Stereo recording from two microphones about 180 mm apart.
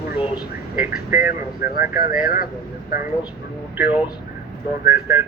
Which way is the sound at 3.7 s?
10° right (ahead or behind).